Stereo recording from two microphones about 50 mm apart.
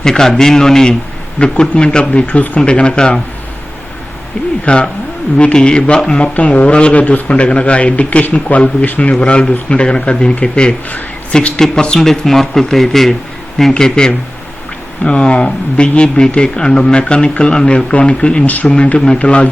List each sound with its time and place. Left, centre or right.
0.0 s a man's voice: centre
2.2 s speech: left
2.6 s speech: left
4.6 s speech: left
10.8 s speech: left
11.3 s a man's voice: centre
18.4 s speech: left
18.9 s speech: centre